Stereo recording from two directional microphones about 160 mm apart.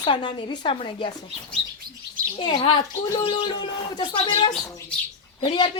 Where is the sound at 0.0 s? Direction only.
30° left (ahead or behind).